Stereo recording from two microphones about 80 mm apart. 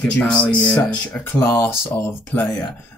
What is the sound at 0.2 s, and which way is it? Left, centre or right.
Speech, centre.